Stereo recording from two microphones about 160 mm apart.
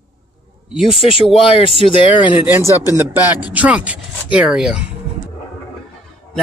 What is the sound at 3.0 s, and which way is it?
Speech, 10° right (ahead or behind).